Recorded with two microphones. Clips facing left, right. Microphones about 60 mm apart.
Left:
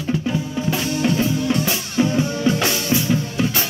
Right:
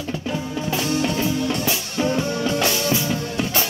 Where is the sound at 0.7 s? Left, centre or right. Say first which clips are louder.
Left 2 dB; centre.